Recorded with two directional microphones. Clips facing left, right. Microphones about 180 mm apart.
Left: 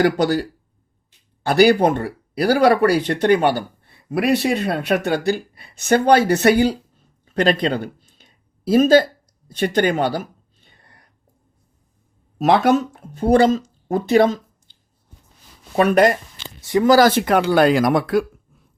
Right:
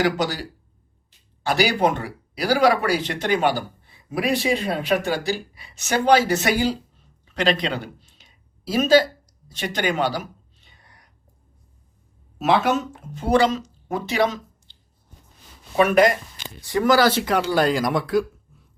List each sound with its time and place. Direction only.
0.0 s speech: 55° left (ahead or behind)
1.5 s speech: 55° left (ahead or behind)
7.3 s a sound: 50° left (ahead or behind)
13.1 s speech: 50° left (ahead or behind)
15.7 s speech: 35° left (ahead or behind)
16.6 s speech: 20° left (ahead or behind)
16.9 s speech: 45° left (ahead or behind)